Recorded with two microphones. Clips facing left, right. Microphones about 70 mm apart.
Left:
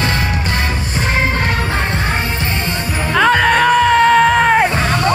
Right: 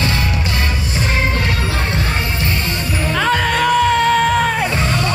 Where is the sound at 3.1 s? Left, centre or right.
Left.